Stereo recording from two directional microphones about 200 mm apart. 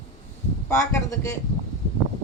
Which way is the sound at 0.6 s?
15° left (ahead or behind).